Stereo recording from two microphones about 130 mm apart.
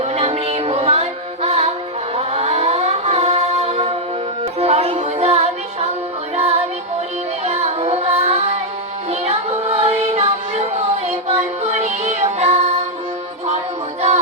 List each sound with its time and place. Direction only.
0.0 s music: 55° right (ahead or behind)
2.1 s a sound: 50° right (ahead or behind)
4.6 s music: 55° right (ahead or behind)
7.4 s child singing: 55° right (ahead or behind)
9.0 s music: 50° right (ahead or behind)